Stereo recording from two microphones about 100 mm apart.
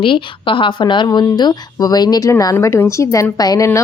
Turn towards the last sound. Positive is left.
turn(degrees=35)  # may be behind; listen again after turning